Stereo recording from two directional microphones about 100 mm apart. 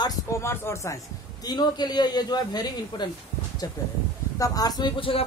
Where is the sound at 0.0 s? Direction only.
40° left (ahead or behind).